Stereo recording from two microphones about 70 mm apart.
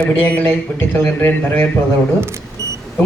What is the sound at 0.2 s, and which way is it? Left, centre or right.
Speech, left.